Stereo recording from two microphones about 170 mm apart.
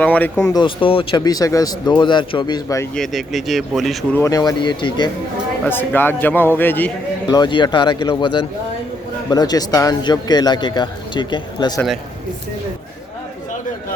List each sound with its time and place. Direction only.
0.0 s a man's voice: 10° left (ahead or behind)
0.5 s a man's voice: 30° left (ahead or behind)
2.9 s speech: centre (ahead or behind)
4.1 s a man's voice: 20° left (ahead or behind)
5.6 s a man's voice: 10° left (ahead or behind)
7.3 s a man's voice: 25° left (ahead or behind)